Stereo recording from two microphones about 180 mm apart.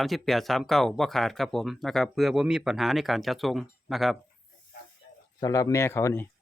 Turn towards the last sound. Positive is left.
turn(degrees=15)  # may be behind; listen again after turning